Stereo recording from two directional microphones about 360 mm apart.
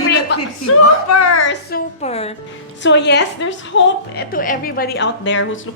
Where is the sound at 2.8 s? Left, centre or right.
Left.